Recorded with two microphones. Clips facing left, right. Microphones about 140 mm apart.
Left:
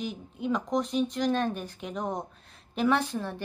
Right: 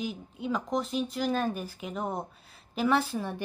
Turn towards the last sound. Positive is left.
turn(degrees=-10)  # may be behind; listen again after turning